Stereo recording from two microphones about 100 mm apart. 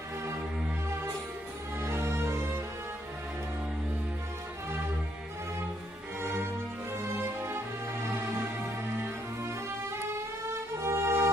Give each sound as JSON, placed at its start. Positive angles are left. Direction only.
{"t": 1.8, "sound": "music", "side_deg": -25}
{"t": 7.2, "sound": "music", "side_deg": -25}